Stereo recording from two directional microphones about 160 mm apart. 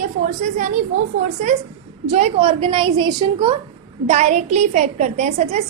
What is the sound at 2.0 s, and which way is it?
A woman's voice, 40° right (ahead or behind).